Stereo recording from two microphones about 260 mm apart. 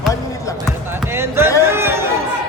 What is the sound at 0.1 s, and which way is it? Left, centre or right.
Basketball bounce, centre.